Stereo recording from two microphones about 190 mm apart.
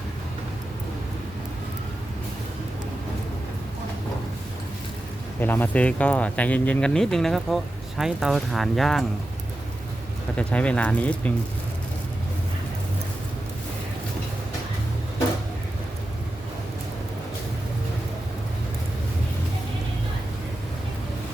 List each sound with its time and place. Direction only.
5.4 s speech: 10° left (ahead or behind)
10.3 s speech: 5° left (ahead or behind)